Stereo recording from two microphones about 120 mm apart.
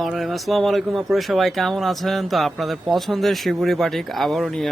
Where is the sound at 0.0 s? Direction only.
Centre (ahead or behind).